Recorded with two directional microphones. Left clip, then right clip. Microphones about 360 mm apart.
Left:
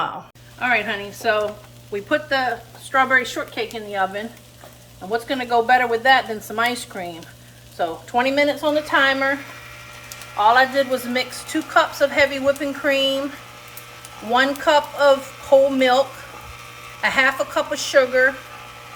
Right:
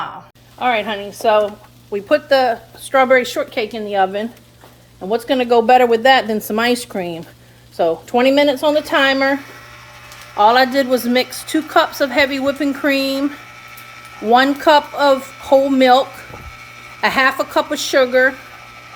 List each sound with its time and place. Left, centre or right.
0.6 s a woman's voice: centre
14.3 s a woman's voice: centre